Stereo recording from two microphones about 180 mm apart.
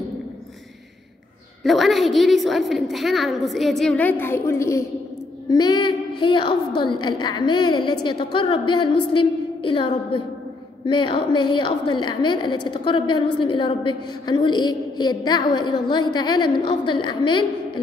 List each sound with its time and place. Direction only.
1.6 s a woman's voice: centre (ahead or behind); by 17.5 s 25° left (ahead or behind)